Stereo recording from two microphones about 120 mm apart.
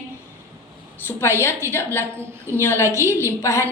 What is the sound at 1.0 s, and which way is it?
A woman's voice, 20° left (ahead or behind).